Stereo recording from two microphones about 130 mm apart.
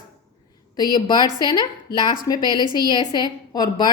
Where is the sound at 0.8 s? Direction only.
35° left (ahead or behind).